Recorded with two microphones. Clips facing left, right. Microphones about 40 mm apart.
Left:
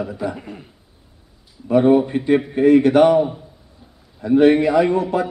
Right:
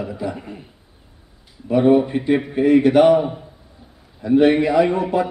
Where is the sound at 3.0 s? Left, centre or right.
Centre.